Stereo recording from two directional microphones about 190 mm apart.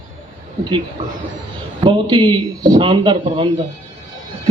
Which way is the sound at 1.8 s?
25° right (ahead or behind).